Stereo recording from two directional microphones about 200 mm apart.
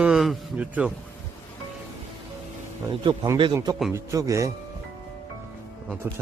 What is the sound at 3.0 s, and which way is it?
A man's voice, 25° right (ahead or behind).